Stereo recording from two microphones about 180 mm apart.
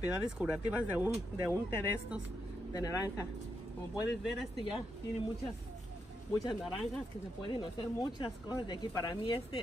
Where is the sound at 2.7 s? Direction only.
20° left (ahead or behind).